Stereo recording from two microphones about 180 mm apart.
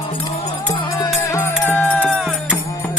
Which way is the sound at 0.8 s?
20° left (ahead or behind).